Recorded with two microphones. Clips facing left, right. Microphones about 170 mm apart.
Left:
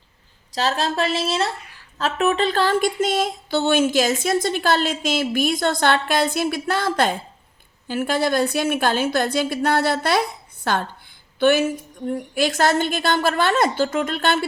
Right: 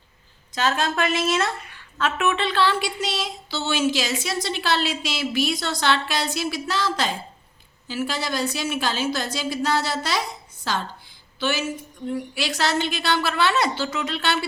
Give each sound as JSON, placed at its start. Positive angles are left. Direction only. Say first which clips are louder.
{"t": 0.5, "sound": "a woman's voice", "louder": "left 1 dB", "side_deg": 35}